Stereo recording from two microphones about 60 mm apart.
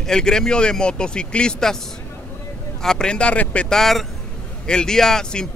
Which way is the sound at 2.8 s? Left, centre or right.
Centre.